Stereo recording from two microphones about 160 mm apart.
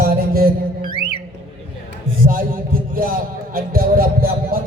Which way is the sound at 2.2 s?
60° right (ahead or behind).